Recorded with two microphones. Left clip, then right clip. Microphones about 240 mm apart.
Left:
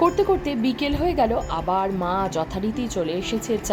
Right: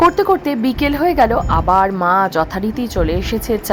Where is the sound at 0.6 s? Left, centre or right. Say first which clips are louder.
Right 7 dB; right.